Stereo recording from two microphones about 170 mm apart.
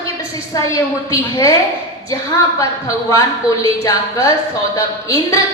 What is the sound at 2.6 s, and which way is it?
A woman's voice, 20° left (ahead or behind).